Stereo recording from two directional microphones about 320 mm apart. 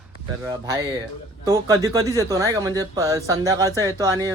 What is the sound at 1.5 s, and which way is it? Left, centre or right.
Speech, centre.